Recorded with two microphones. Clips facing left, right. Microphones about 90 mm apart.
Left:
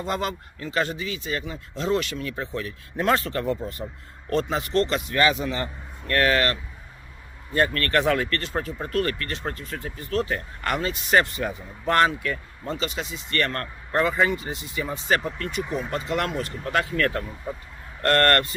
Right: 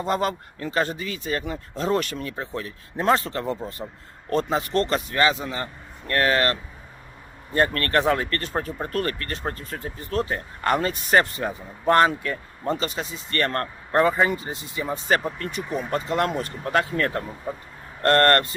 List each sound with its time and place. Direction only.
0.0 s speech: 40° right (ahead or behind)